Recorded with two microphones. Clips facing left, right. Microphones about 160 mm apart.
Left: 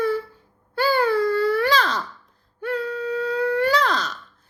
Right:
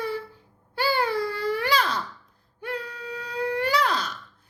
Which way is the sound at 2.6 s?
15° right (ahead or behind).